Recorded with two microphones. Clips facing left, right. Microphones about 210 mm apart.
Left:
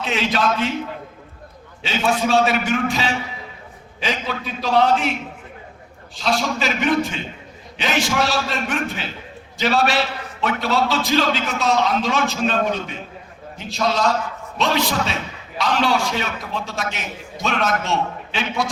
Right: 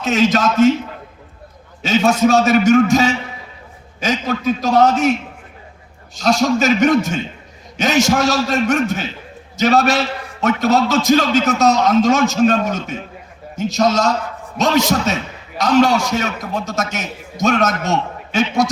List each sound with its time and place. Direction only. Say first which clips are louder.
0.0 s a man's voice: right 6 dB; 45° right (ahead or behind)
1.8 s a man's voice: right 7 dB; 45° right (ahead or behind)
6.1 s a man's voice: right 7 dB; 45° right (ahead or behind)